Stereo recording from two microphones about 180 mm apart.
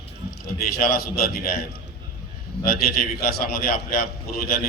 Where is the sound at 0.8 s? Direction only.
60° left (ahead or behind).